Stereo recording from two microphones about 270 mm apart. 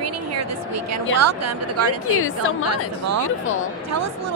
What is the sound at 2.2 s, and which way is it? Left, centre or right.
Speech, left.